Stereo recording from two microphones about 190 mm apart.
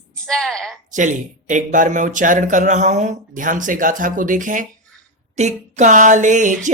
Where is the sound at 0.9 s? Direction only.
40° right (ahead or behind).